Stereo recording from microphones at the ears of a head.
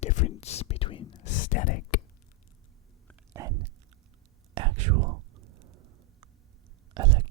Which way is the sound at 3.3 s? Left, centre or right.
Right.